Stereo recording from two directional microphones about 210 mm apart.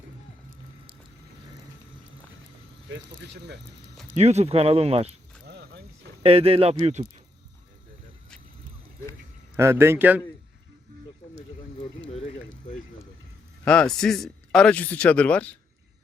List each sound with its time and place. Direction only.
4.1 s speech: 30° right (ahead or behind)
5.5 s a sound: 50° right (ahead or behind)
6.2 s speech: 25° right (ahead or behind)
9.6 s a man's voice: 10° right (ahead or behind)
13.7 s speech: 5° left (ahead or behind)